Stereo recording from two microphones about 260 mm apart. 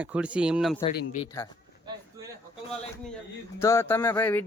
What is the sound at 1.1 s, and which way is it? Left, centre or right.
Speech, centre.